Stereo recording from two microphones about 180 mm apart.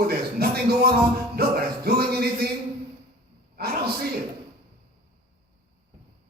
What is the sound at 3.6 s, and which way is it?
Speech, 60° right (ahead or behind).